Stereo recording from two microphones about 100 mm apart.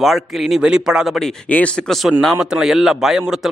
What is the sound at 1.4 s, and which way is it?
A man's voice, 15° left (ahead or behind).